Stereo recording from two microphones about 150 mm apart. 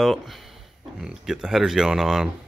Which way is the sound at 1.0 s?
5° right (ahead or behind).